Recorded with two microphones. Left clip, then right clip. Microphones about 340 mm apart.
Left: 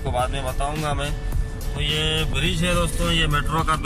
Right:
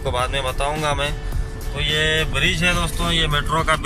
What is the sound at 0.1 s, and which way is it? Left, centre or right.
Speech, centre.